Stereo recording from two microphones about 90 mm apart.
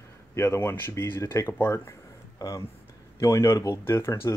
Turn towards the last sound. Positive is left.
turn(degrees=30)  # may be behind; listen again after turning